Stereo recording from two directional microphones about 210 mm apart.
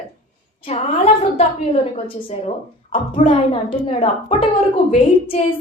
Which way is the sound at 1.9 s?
30° left (ahead or behind).